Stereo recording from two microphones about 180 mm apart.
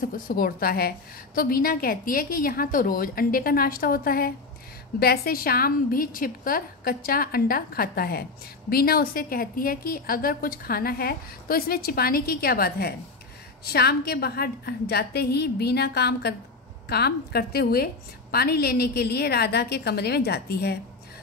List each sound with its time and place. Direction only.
0.3 s a woman's voice: 55° left (ahead or behind)